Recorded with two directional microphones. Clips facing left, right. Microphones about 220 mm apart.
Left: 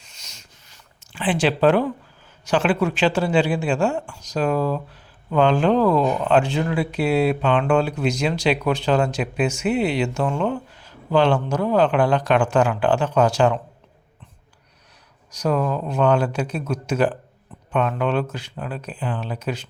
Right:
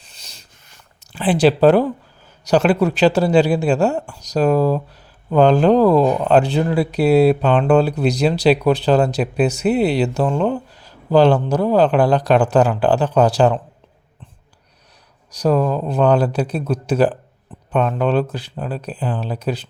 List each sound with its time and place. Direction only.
0.0 s a sound: 35° right (ahead or behind)
1.1 s speech: 40° right (ahead or behind)
15.3 s speech: 35° right (ahead or behind)